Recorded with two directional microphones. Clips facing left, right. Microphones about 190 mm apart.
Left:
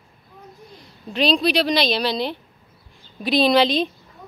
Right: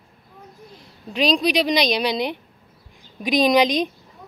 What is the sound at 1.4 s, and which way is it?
A woman's voice, 15° right (ahead or behind).